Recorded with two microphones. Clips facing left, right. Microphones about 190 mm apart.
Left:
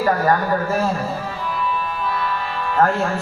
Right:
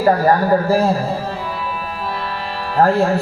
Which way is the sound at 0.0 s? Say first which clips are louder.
Right 4 dB; 35° right (ahead or behind).